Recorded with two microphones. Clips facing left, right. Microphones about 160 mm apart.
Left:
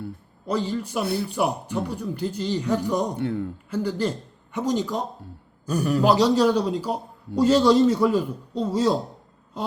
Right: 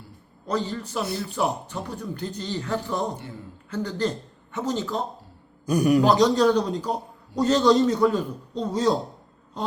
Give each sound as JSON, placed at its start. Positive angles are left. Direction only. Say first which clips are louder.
{"t": 0.4, "sound": "a man's voice", "louder": "left 2 dB", "side_deg": 10}
{"t": 3.2, "sound": "speech", "louder": "left 13 dB", "side_deg": 60}
{"t": 3.7, "sound": "a man's voice", "louder": "even", "side_deg": 10}
{"t": 5.6, "sound": "speech", "louder": "right 4 dB", "side_deg": -10}
{"t": 6.0, "sound": "a man's voice", "louder": "left 4 dB", "side_deg": 10}